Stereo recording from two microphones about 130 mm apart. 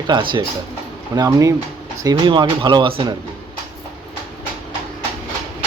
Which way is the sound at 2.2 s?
35° right (ahead or behind).